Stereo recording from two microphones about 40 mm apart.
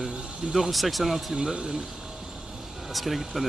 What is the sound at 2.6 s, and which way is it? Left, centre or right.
Vehicle, centre.